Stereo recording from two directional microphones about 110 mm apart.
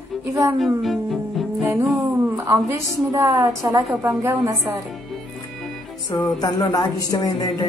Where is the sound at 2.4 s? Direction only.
25° right (ahead or behind).